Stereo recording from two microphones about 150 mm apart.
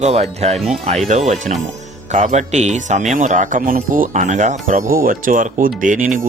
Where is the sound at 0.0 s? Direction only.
45° right (ahead or behind).